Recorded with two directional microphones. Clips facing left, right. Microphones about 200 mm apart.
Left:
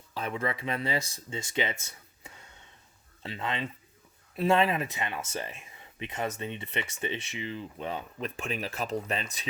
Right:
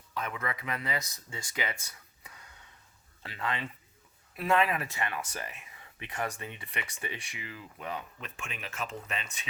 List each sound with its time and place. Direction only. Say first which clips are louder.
0.1 s speech: left 4 dB; 30° left (ahead or behind)